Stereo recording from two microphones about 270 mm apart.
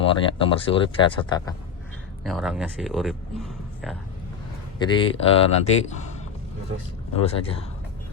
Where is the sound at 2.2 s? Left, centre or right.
Centre.